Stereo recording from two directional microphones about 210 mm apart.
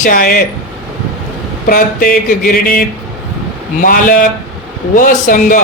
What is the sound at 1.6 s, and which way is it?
Speech, 40° left (ahead or behind).